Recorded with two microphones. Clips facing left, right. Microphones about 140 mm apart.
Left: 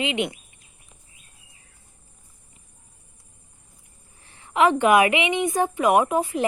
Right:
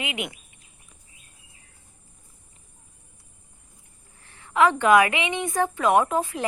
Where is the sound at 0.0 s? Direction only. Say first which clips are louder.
Left 6 dB; 30° left (ahead or behind).